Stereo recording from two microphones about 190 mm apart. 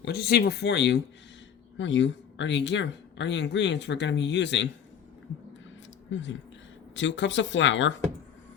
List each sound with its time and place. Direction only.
0.0 s speech: 60° left (ahead or behind)
6.1 s speech: 70° left (ahead or behind)